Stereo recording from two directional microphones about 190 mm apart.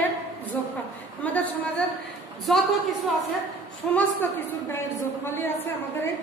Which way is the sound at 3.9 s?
10° left (ahead or behind).